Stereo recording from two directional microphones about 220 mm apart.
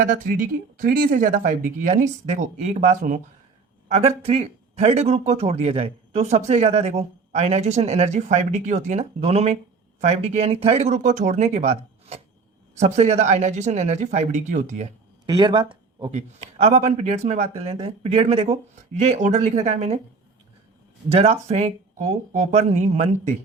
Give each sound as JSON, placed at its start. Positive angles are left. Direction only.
{"t": 0.0, "sound": "speech", "side_deg": -40}
{"t": 15.3, "sound": "speech", "side_deg": -20}
{"t": 21.1, "sound": "speech", "side_deg": -30}